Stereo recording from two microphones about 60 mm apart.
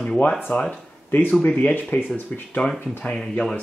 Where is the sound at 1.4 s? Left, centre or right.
Left.